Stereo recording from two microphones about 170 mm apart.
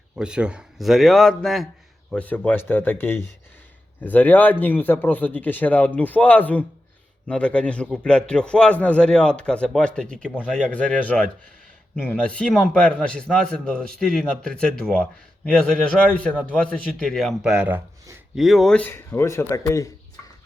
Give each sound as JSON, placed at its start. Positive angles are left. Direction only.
{"t": 0.2, "sound": "a man's voice", "side_deg": -5}